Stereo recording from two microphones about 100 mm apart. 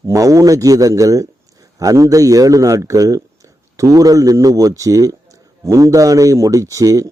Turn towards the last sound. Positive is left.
turn(degrees=-35)  # may be behind; listen again after turning